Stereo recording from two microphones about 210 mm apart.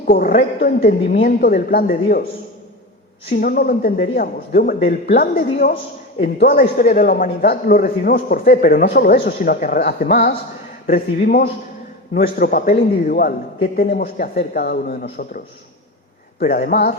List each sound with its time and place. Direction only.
0.1 s speech: 45° left (ahead or behind)
3.2 s speech: 45° left (ahead or behind)
16.4 s speech: 45° left (ahead or behind)